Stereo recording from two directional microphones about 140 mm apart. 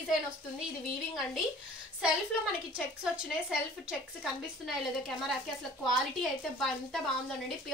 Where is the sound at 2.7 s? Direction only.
5° right (ahead or behind).